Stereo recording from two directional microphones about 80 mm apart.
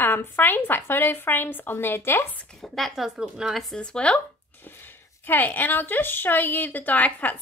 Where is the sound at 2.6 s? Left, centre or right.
Centre.